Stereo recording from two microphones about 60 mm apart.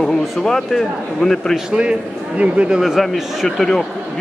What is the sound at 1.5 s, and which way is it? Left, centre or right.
A man's voice, centre.